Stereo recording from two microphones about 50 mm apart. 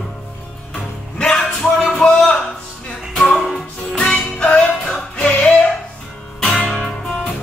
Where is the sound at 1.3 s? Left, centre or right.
Centre.